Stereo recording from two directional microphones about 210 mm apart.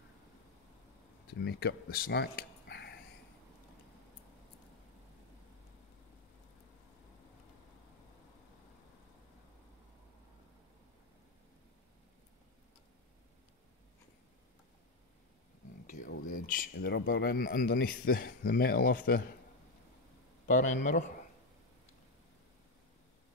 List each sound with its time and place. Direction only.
1.4 s speech: 50° left (ahead or behind)
15.9 s speech: 40° left (ahead or behind)
20.4 s a man's voice: 35° left (ahead or behind)